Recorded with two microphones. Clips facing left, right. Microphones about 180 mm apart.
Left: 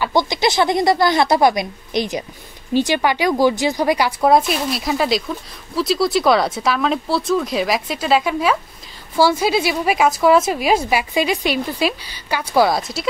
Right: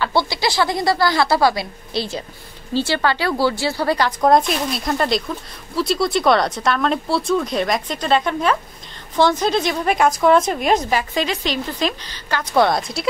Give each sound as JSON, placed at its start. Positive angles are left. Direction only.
{"t": 0.0, "sound": "a woman's voice", "side_deg": 15}